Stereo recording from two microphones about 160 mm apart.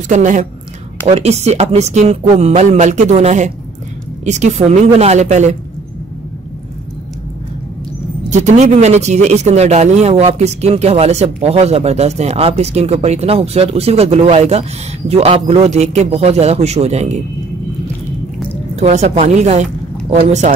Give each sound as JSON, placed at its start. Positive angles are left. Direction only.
{"t": 0.1, "sound": "a man's voice", "side_deg": -50}
{"t": 8.3, "sound": "a man's voice", "side_deg": -45}
{"t": 18.8, "sound": "a woman's voice", "side_deg": -45}